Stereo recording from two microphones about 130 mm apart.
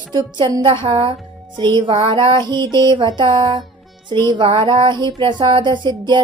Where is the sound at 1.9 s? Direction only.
50° right (ahead or behind).